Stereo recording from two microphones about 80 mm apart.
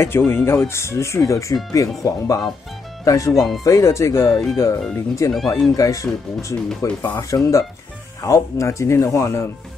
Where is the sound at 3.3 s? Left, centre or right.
Centre.